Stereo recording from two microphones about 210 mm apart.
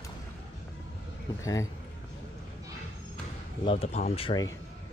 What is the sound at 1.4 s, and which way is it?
Speech, 15° left (ahead or behind).